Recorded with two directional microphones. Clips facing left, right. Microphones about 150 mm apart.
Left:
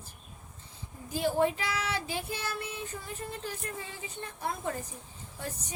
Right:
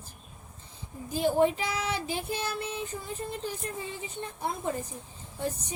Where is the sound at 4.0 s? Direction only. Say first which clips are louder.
Right 3 dB; 20° right (ahead or behind).